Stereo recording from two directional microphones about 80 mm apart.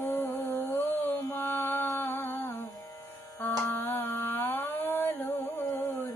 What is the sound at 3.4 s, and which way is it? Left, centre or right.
Music, left.